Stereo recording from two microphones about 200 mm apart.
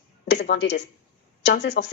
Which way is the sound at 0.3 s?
55° left (ahead or behind).